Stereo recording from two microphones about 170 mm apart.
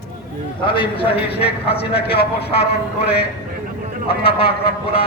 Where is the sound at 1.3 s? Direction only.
70° left (ahead or behind).